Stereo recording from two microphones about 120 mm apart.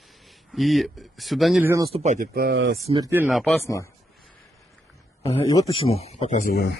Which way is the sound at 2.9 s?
55° right (ahead or behind).